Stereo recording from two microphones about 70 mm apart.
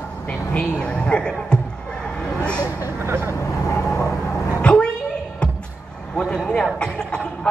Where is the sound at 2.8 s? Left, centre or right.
Right.